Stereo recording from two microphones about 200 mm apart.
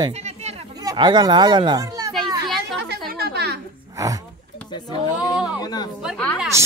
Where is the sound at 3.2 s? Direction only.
55° right (ahead or behind).